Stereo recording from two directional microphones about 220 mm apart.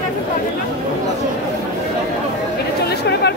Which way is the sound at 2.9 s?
50° left (ahead or behind).